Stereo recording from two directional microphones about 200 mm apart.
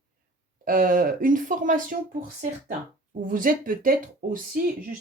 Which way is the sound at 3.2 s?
45° right (ahead or behind).